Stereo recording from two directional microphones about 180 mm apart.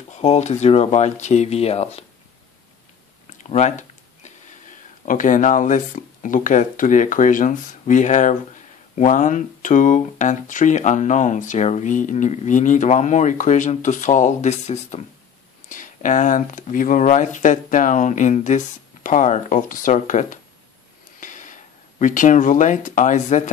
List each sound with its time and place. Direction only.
0.1 s speech: 40° left (ahead or behind)
3.3 s a sound: 40° left (ahead or behind)
5.0 s speech: 45° left (ahead or behind)